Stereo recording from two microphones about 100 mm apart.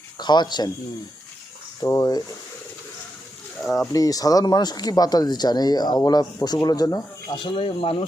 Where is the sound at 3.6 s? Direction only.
Centre (ahead or behind).